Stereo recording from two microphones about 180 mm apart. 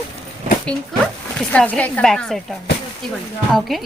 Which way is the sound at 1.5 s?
5° left (ahead or behind).